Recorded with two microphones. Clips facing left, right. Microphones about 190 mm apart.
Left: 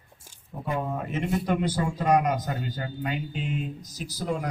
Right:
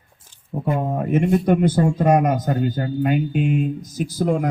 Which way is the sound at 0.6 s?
50° right (ahead or behind).